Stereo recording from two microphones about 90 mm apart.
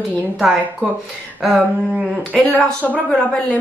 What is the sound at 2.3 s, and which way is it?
A woman's voice, 15° left (ahead or behind).